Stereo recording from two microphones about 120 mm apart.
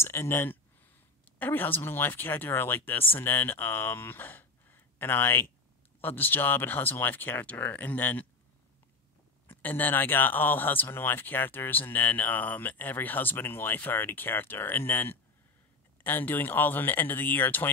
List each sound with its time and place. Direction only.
0.0 s speech: 20° left (ahead or behind)
9.5 s speech: 15° left (ahead or behind)